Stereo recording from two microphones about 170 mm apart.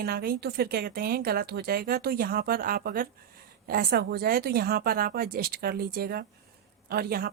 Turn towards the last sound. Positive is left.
turn(degrees=-65)  # may be behind; listen again after turning